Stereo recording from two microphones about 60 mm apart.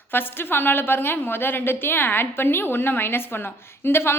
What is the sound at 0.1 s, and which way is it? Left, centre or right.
A woman's voice, left.